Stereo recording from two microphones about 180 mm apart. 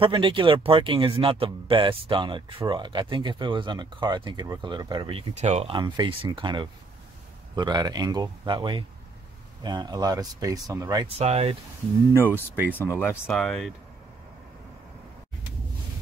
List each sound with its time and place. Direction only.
0.0 s speech: 30° right (ahead or behind)
11.1 s speech: 35° right (ahead or behind)
12.7 s speech: 10° left (ahead or behind)
13.3 s speech: centre (ahead or behind)